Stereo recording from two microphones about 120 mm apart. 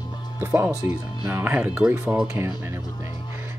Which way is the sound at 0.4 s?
15° right (ahead or behind).